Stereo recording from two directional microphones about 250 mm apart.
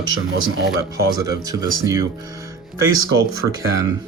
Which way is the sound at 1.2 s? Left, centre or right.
Centre.